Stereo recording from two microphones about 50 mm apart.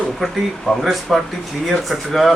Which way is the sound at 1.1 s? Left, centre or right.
Centre.